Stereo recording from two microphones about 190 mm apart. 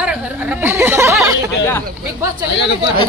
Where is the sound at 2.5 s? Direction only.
65° left (ahead or behind).